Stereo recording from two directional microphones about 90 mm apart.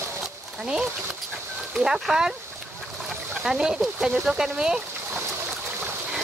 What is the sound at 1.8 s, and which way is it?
Speech, 5° right (ahead or behind).